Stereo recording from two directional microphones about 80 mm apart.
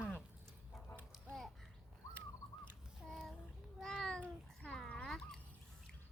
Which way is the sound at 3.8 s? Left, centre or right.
Centre.